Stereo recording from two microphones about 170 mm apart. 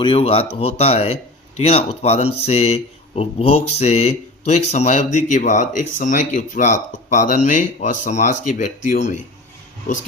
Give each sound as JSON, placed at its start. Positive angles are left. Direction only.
{"t": 0.0, "sound": "speech", "side_deg": 35}